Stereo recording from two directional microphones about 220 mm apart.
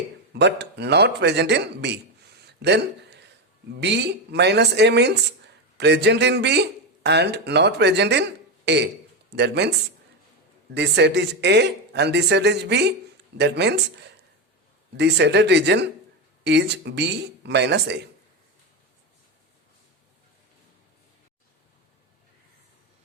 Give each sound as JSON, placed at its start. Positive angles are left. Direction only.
{"t": 0.3, "sound": "speech", "side_deg": -50}
{"t": 2.6, "sound": "a sound", "side_deg": -50}
{"t": 3.8, "sound": "speech", "side_deg": -50}